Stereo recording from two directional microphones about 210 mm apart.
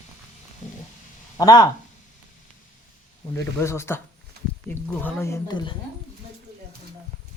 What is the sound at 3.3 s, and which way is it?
Speech, 15° left (ahead or behind).